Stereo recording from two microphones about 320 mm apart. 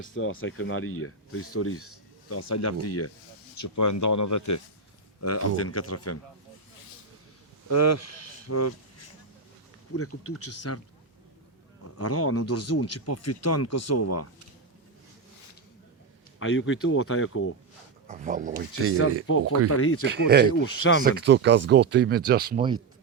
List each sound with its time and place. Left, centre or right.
0.0 s speech: left
3.6 s speech: left
5.2 s speech: left
7.7 s speech: left
9.9 s speech: left
11.8 s speech: left
16.4 s speech: left
18.1 s speech: right
19.3 s speech: left
20.1 s speech: right
20.5 s speech: left
21.0 s speech: right